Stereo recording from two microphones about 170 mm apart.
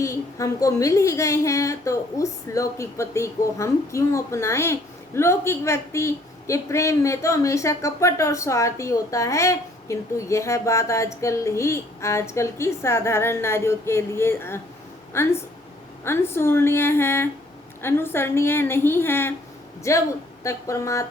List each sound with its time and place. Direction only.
0.0 s a woman's voice: 20° left (ahead or behind)